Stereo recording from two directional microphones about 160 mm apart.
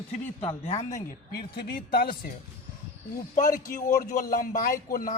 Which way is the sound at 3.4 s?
55° left (ahead or behind).